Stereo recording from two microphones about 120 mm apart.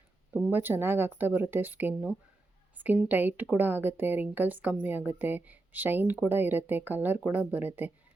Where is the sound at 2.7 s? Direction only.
15° right (ahead or behind).